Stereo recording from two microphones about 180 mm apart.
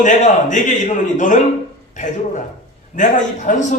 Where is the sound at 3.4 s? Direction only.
45° left (ahead or behind).